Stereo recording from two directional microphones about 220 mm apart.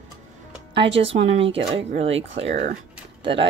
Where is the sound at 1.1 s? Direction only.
25° right (ahead or behind).